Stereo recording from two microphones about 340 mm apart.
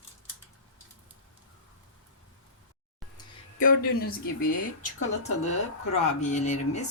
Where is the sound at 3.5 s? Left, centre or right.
Left.